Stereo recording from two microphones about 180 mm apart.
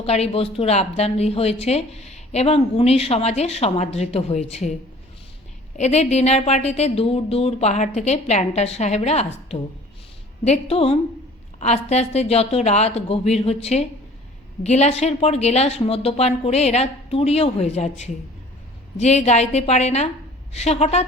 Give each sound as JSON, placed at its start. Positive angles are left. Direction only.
{"t": 0.0, "sound": "speech", "side_deg": 35}
{"t": 5.7, "sound": "speech", "side_deg": 40}